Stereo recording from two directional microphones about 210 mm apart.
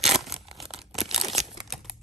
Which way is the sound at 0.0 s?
Centre (ahead or behind).